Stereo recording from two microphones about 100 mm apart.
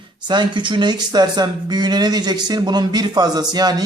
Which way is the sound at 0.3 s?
50° right (ahead or behind).